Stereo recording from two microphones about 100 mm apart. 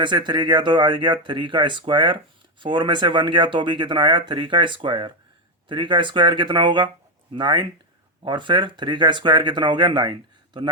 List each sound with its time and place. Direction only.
0.0 s speech: 50° right (ahead or behind)